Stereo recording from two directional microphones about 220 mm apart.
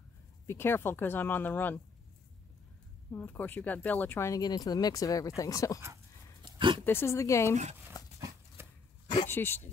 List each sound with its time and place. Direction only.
0.5 s speech: 10° left (ahead or behind)
3.1 s speech: 10° left (ahead or behind)
6.4 s a sound: 20° right (ahead or behind)
6.8 s speech: 10° left (ahead or behind)
8.0 s horse: 15° left (ahead or behind)
8.6 s a sound: 10° right (ahead or behind)
9.3 s speech: 10° left (ahead or behind)